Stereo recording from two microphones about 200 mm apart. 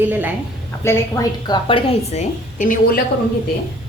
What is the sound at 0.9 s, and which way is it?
A woman's voice, 15° left (ahead or behind).